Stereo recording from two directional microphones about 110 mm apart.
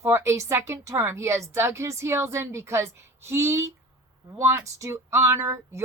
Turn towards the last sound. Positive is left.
turn(degrees=-25)  # may be behind; listen again after turning